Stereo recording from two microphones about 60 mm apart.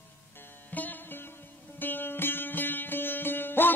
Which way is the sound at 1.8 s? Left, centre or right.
Left.